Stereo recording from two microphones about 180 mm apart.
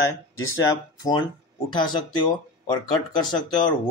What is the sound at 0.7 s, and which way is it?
Speech, 20° left (ahead or behind).